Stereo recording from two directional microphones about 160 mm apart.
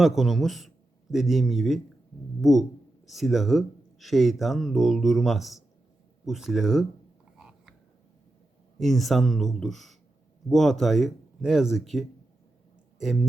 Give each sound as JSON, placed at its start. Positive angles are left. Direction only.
{"t": 0.0, "sound": "speech", "side_deg": 0}
{"t": 7.3, "sound": "frog", "side_deg": -5}
{"t": 8.8, "sound": "speech", "side_deg": 0}